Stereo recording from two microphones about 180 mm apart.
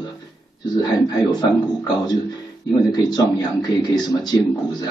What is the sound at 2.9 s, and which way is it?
Speech, 20° left (ahead or behind).